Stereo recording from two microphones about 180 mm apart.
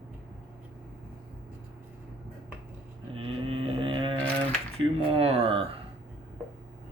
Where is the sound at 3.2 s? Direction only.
30° right (ahead or behind).